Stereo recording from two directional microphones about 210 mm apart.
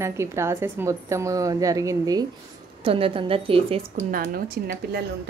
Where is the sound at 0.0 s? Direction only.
15° right (ahead or behind).